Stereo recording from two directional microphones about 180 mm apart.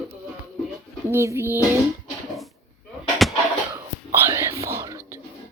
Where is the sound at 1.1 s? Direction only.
15° right (ahead or behind).